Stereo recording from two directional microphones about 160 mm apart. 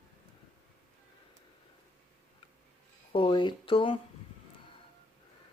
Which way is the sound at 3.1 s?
30° left (ahead or behind).